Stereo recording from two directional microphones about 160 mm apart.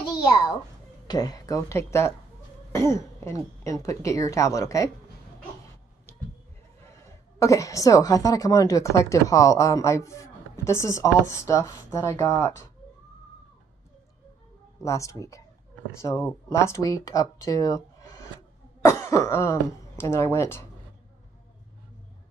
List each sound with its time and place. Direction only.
0.0 s a child's voice: 25° left (ahead or behind)
6.1 s a sound: 15° left (ahead or behind)
7.3 s a woman's voice: 20° left (ahead or behind)
14.8 s a woman's voice: 20° left (ahead or behind)